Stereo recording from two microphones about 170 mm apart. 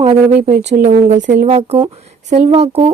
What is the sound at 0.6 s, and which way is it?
Speech, 45° right (ahead or behind).